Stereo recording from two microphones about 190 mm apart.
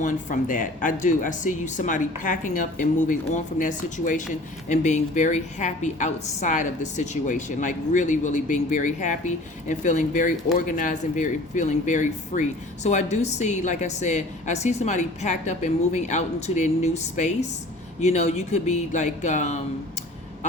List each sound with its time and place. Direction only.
0.0 s a woman's voice: 40° left (ahead or behind)